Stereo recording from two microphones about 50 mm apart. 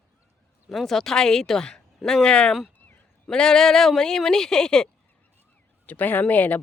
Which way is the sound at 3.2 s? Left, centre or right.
Centre.